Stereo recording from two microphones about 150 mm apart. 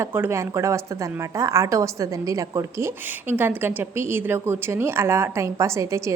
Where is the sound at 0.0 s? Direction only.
15° right (ahead or behind).